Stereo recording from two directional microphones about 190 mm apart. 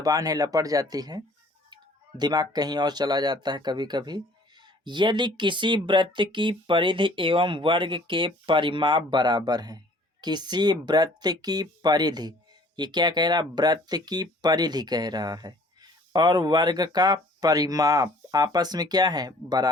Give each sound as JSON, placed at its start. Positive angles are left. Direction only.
{"t": 0.0, "sound": "speech", "side_deg": -20}